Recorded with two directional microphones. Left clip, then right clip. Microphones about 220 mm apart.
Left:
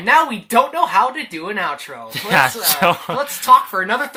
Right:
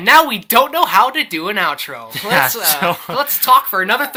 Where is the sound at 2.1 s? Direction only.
5° left (ahead or behind).